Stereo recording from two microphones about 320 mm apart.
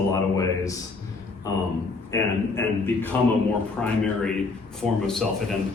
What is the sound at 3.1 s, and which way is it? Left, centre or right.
Speech, centre.